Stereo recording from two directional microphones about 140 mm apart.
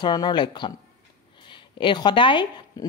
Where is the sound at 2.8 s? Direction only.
25° left (ahead or behind).